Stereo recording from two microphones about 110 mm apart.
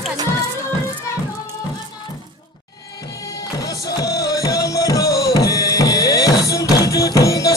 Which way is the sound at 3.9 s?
35° left (ahead or behind).